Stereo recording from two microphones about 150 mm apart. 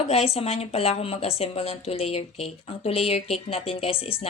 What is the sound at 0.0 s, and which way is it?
A woman's voice, 45° left (ahead or behind).